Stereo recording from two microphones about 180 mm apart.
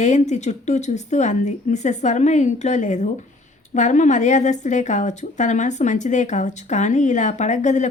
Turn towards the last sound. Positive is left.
turn(degrees=40)  # may be behind; listen again after turning